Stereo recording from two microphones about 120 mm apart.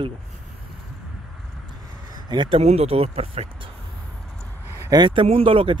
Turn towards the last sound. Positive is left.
turn(degrees=-50)  # may be behind; listen again after turning